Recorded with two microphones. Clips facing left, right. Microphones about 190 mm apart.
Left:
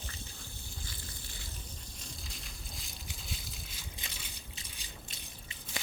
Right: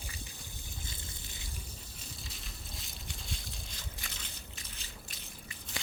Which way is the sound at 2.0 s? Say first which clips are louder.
Even; centre (ahead or behind).